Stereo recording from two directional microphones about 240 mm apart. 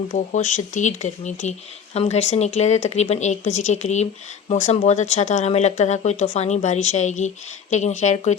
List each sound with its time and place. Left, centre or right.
0.1 s speech: left